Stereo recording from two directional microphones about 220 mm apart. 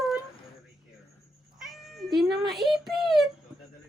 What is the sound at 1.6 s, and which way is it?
Cat, centre (ahead or behind).